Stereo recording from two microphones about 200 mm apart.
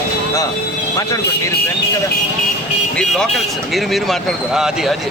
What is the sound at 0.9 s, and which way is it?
Speech, 15° left (ahead or behind).